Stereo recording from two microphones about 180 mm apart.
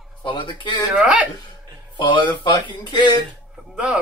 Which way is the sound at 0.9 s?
5° right (ahead or behind).